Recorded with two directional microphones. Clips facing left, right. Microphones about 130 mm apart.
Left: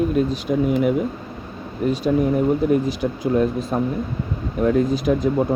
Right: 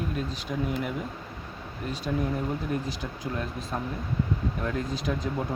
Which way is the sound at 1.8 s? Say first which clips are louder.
Left 11 dB; 85° left.